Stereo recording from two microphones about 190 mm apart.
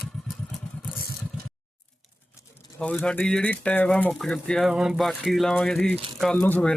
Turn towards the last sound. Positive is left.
turn(degrees=5)  # may be behind; listen again after turning